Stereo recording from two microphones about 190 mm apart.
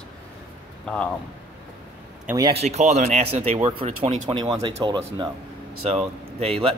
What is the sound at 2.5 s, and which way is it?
Speech, 35° right (ahead or behind).